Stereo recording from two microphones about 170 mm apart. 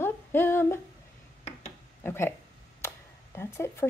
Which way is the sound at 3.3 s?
15° left (ahead or behind).